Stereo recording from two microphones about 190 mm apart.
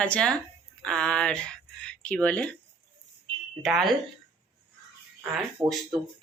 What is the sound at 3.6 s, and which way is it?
Speech, centre (ahead or behind).